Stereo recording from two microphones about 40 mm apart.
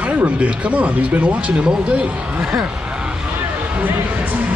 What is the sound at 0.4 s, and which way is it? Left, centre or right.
Speech, right.